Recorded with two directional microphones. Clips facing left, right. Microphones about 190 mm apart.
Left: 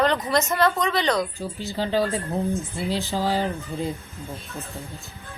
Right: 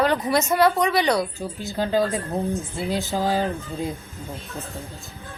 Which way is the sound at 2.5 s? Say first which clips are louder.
Even; centre (ahead or behind).